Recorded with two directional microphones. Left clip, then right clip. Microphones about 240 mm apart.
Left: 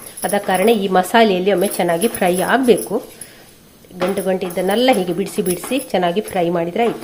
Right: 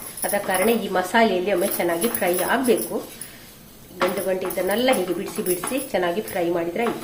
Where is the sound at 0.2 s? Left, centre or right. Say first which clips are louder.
Left 5 dB; left.